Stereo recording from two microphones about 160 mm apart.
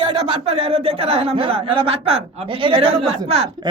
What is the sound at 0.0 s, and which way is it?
A man's voice, 35° right (ahead or behind).